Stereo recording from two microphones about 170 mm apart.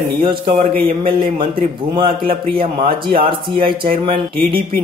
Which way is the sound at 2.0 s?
30° right (ahead or behind).